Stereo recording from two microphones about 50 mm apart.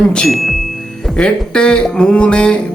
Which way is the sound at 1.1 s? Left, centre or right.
Centre.